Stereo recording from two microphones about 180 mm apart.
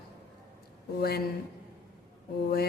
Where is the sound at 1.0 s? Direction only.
60° left (ahead or behind).